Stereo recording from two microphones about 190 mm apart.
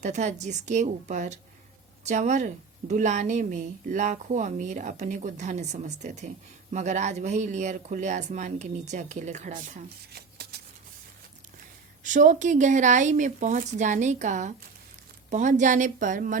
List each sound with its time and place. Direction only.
0.0 s speech: 40° right (ahead or behind)
10.1 s shuffling cards: 55° right (ahead or behind)
12.0 s speech: 40° right (ahead or behind)